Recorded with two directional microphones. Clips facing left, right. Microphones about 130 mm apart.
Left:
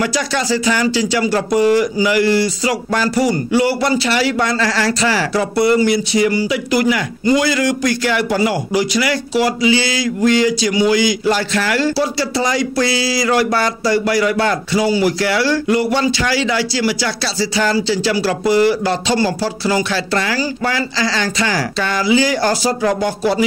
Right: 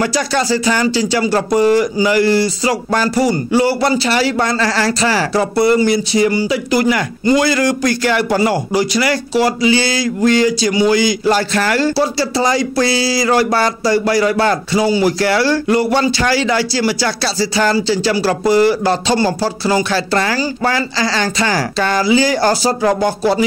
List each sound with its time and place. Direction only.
0.0 s speech: 35° right (ahead or behind)
15.1 s speech: 40° right (ahead or behind)